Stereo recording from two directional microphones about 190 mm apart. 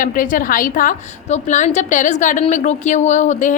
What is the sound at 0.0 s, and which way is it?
A woman's voice, 45° left (ahead or behind).